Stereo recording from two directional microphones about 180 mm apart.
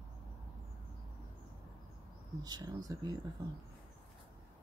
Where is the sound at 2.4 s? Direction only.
20° right (ahead or behind).